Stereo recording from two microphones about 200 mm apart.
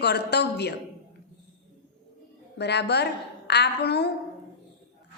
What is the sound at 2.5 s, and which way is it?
A man's voice, 55° left (ahead or behind).